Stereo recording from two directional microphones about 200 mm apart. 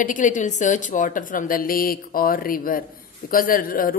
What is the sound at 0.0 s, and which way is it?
A woman's voice, 40° left (ahead or behind).